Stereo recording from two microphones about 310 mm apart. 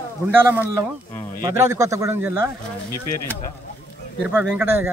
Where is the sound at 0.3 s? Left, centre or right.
Centre.